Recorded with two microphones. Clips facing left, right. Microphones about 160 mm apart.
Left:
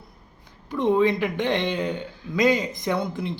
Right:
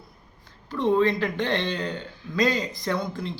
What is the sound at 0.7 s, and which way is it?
Speech, 15° left (ahead or behind).